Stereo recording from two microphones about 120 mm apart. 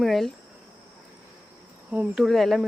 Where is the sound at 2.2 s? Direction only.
Centre (ahead or behind).